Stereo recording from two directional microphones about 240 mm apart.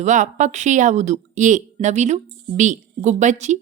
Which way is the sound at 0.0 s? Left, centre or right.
Right.